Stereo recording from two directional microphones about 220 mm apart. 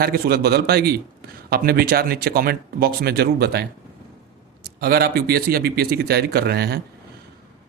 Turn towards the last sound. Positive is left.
turn(degrees=-45)  # may be behind; listen again after turning